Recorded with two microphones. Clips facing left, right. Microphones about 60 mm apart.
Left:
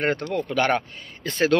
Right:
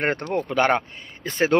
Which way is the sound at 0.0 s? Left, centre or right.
Right.